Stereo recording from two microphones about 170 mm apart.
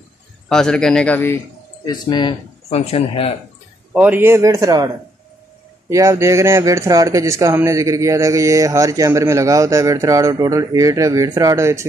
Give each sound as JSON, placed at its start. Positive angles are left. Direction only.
{"t": 0.5, "sound": "a man's voice", "side_deg": 5}
{"t": 1.9, "sound": "speech", "side_deg": 25}
{"t": 3.9, "sound": "a man's voice", "side_deg": -10}